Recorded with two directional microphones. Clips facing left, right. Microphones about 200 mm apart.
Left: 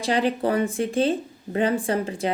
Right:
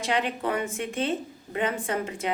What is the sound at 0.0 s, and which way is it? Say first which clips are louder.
A woman's voice: left 5 dB; 35° left (ahead or behind).